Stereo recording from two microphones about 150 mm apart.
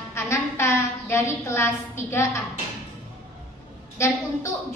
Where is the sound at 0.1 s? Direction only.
20° left (ahead or behind).